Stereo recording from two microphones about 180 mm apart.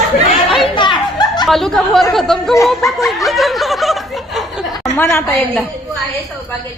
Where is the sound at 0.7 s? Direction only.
25° left (ahead or behind).